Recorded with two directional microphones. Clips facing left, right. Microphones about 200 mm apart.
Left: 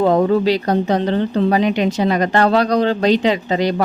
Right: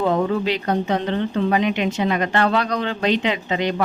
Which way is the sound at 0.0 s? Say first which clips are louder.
Left 6 dB; 40° left (ahead or behind).